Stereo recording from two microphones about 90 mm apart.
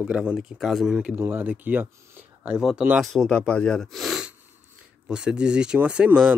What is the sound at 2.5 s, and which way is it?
Speech, 10° right (ahead or behind).